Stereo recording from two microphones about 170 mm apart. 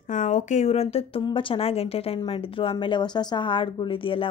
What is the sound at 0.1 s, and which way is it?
Speech, 45° left (ahead or behind).